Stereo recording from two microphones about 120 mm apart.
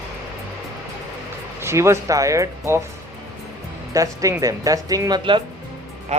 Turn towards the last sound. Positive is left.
turn(degrees=-70)  # may be behind; listen again after turning